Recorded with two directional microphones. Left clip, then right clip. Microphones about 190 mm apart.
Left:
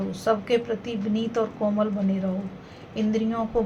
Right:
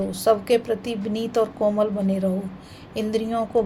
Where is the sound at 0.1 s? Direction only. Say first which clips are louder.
Right 4 dB; 45° right (ahead or behind).